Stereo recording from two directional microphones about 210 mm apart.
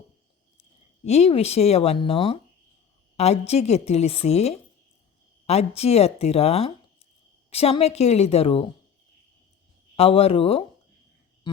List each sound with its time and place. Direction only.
1.0 s a woman's voice: 30° left (ahead or behind)
9.9 s a woman's voice: 25° left (ahead or behind)